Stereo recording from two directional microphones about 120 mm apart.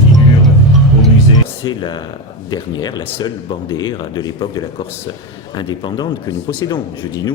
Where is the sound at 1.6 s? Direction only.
40° left (ahead or behind).